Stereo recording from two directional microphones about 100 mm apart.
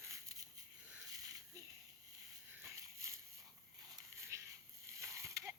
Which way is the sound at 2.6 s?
30° right (ahead or behind).